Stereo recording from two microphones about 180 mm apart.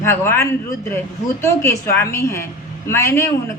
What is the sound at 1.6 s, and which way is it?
Speech, 15° left (ahead or behind).